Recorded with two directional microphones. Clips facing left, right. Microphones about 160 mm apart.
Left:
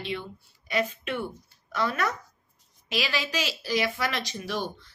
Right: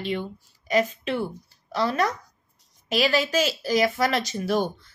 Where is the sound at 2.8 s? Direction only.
45° right (ahead or behind).